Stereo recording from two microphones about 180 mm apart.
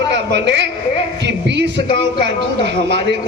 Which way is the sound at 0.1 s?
75° right (ahead or behind).